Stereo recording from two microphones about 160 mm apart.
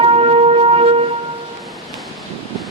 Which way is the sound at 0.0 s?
40° right (ahead or behind).